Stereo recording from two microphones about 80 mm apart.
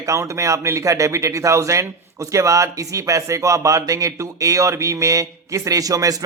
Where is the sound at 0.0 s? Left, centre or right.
Right.